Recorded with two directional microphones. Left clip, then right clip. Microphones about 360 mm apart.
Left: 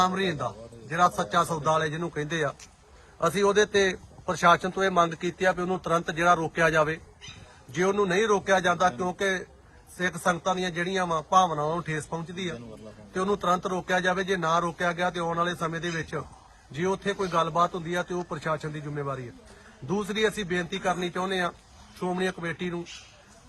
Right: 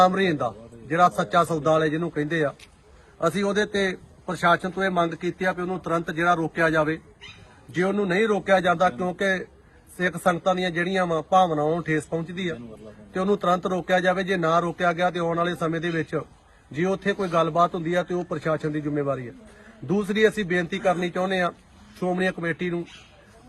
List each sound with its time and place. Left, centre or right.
0.0 s a man's voice: centre